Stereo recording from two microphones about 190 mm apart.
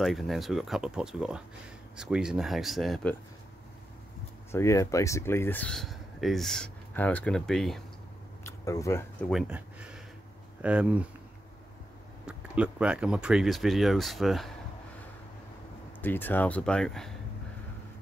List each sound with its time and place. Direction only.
0.0 s speech: centre (ahead or behind)
4.5 s speech: 15° left (ahead or behind)
8.5 s speech: 15° left (ahead or behind)
9.3 s speech: 5° right (ahead or behind)
12.3 s speech: 5° right (ahead or behind)
16.0 s speech: 10° left (ahead or behind)